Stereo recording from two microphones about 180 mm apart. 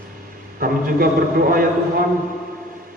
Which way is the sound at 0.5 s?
55° right (ahead or behind).